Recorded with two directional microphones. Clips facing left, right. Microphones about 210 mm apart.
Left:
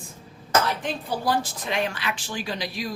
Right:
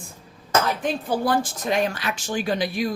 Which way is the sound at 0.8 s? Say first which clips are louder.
Right 5 dB; 50° right (ahead or behind).